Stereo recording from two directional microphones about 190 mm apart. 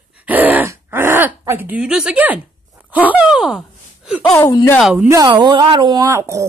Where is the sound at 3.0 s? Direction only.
5° right (ahead or behind).